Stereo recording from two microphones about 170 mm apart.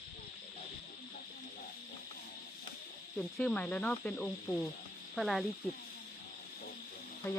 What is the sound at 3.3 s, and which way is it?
Speech, 5° left (ahead or behind).